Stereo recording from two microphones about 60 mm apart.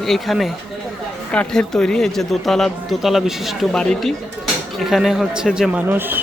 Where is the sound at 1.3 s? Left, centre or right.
Centre.